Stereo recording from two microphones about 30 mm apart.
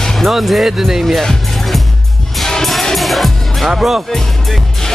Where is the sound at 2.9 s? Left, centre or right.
Centre.